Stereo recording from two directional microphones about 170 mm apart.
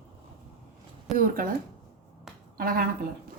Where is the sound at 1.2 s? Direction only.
55° right (ahead or behind).